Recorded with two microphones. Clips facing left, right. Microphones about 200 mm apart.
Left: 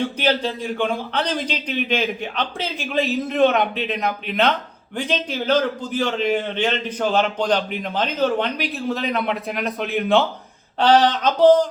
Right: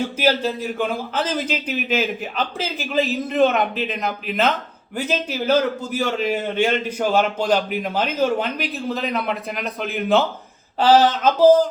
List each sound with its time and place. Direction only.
0.0 s a man's voice: 5° right (ahead or behind)